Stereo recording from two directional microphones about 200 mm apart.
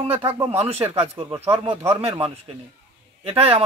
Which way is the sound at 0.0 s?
30° right (ahead or behind).